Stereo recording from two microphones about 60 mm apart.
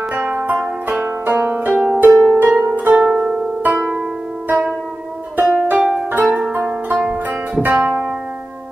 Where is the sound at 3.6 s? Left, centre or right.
Right.